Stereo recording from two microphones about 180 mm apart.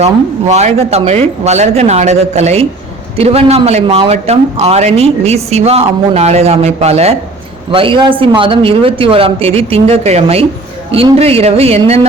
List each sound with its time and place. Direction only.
0.0 s a man's voice: 40° right (ahead or behind)